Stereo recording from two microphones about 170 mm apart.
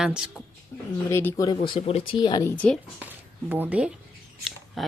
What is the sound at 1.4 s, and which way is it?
Speech, 30° left (ahead or behind).